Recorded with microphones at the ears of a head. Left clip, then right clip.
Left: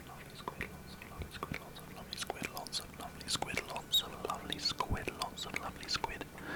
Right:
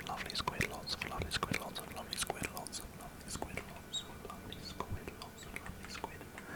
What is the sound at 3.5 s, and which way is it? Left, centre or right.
Whispering, left.